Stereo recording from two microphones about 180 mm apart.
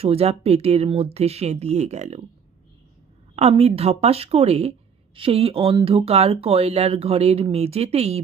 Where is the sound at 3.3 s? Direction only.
35° right (ahead or behind).